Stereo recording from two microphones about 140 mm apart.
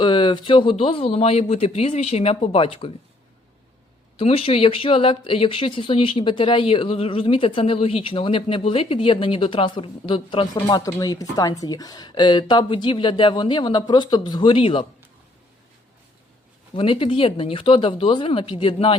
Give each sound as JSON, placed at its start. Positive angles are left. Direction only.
{"t": 0.0, "sound": "speech", "side_deg": 35}
{"t": 4.2, "sound": "speech", "side_deg": 45}
{"t": 16.7, "sound": "speech", "side_deg": 40}